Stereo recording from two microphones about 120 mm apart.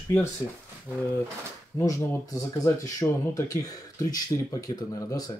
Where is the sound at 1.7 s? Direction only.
25° left (ahead or behind).